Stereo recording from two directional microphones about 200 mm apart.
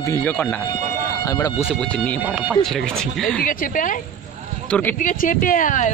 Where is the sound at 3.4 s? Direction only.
45° left (ahead or behind).